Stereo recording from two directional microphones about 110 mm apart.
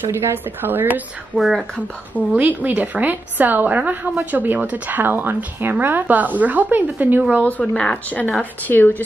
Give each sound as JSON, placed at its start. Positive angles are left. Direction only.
{"t": 0.0, "sound": "speech", "side_deg": -25}
{"t": 1.3, "sound": "speech", "side_deg": 0}
{"t": 2.1, "sound": "a woman's voice", "side_deg": -15}
{"t": 7.4, "sound": "speech", "side_deg": 10}